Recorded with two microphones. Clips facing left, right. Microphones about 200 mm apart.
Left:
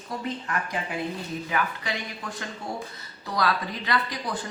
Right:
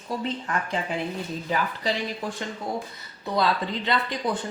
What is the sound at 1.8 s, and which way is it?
Speech, 30° right (ahead or behind).